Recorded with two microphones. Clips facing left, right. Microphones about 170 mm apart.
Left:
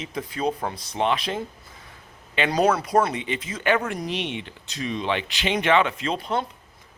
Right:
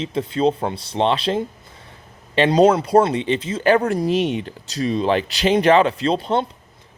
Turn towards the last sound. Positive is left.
turn(degrees=-30)  # may be behind; listen again after turning